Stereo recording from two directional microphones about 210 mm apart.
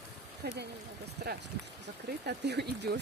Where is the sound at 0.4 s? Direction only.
50° right (ahead or behind).